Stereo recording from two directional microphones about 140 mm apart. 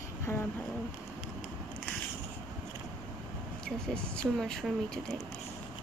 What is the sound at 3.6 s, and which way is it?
Speech, 5° left (ahead or behind).